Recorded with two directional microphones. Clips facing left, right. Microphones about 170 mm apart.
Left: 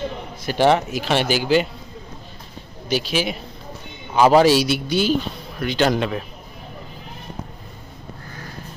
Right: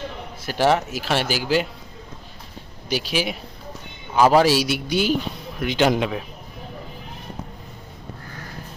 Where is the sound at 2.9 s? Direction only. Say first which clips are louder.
Left 2 dB; 10° right (ahead or behind).